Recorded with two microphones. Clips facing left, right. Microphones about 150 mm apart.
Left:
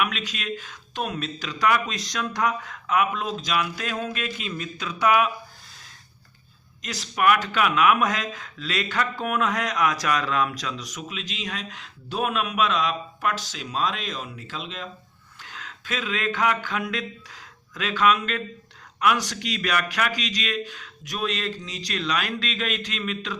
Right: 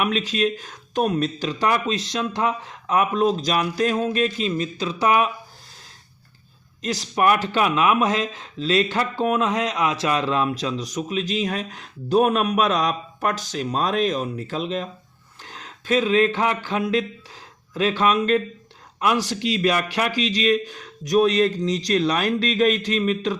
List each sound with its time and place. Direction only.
0.0 s speech: 35° right (ahead or behind)
6.8 s speech: 35° right (ahead or behind)